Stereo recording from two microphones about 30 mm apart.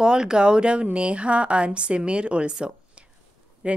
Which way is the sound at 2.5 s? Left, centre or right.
Right.